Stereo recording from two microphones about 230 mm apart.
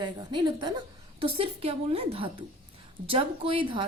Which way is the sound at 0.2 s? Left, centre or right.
Centre.